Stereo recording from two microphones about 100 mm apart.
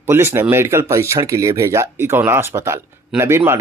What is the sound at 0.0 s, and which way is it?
Speech, 25° right (ahead or behind).